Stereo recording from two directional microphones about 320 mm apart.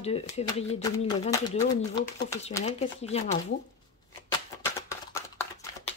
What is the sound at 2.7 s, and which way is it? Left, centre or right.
Speech, centre.